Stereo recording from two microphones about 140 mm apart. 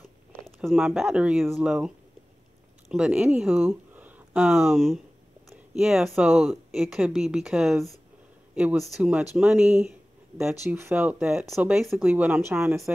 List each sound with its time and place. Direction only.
0.7 s speech: centre (ahead or behind)
2.9 s speech: 5° right (ahead or behind)
12.1 s speech: 15° right (ahead or behind)